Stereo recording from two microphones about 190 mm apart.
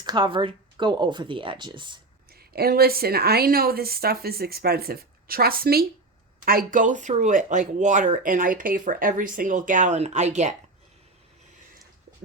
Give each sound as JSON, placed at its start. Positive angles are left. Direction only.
{"t": 0.0, "sound": "speech", "side_deg": -25}
{"t": 2.3, "sound": "speech", "side_deg": -55}